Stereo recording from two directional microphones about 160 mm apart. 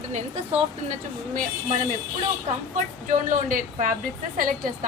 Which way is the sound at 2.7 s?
55° right (ahead or behind).